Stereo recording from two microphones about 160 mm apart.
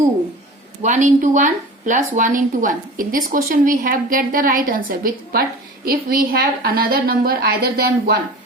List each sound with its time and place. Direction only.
0.8 s speech: 50° right (ahead or behind); by 8.2 s 75° right (ahead or behind)